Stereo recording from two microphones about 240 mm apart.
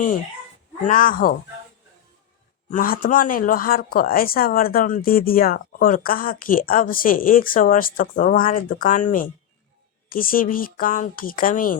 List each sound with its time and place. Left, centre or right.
0.9 s speech: left
2.6 s speech: left